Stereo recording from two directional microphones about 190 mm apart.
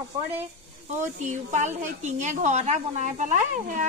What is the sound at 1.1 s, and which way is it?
A woman's voice, 40° right (ahead or behind).